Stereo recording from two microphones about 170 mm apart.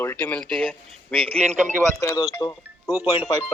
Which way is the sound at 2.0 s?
20° left (ahead or behind).